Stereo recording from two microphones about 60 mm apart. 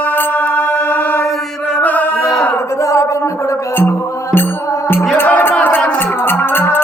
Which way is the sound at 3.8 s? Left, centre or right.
Left.